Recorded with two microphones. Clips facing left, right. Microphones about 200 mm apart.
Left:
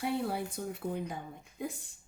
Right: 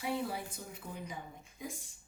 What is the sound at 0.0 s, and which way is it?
Speech, 60° left (ahead or behind).